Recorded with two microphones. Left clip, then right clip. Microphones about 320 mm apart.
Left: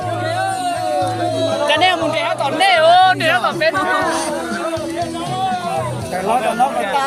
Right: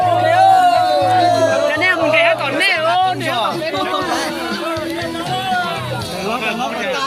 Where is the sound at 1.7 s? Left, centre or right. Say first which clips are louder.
Right 1 dB; left.